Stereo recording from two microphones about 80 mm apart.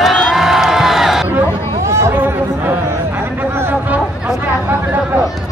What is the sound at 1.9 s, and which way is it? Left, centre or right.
Chatter, right.